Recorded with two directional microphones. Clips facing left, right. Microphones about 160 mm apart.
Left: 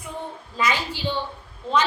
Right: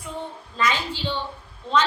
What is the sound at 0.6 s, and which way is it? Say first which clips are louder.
Speech: even; 10° left (ahead or behind).